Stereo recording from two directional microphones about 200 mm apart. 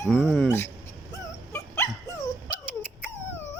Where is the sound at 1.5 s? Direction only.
10° left (ahead or behind).